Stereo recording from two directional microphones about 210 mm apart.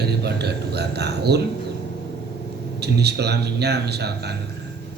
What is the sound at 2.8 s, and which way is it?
A man's voice, 50° right (ahead or behind).